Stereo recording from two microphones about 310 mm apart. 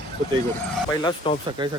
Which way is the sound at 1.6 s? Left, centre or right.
Centre.